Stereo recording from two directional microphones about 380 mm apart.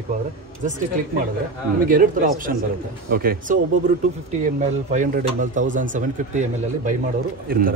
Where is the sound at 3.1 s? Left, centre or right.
Right.